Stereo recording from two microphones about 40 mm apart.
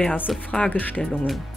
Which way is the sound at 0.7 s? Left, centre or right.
Left.